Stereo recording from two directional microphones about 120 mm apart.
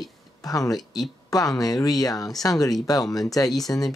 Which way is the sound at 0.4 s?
30° left (ahead or behind).